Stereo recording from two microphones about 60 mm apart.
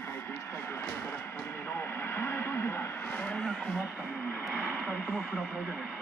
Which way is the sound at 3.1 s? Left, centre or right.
Centre.